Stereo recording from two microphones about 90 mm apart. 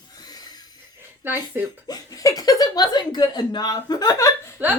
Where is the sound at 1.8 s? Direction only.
45° left (ahead or behind).